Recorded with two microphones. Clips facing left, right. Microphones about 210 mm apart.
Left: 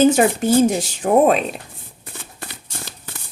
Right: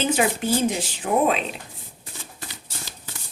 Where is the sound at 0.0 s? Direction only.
45° left (ahead or behind).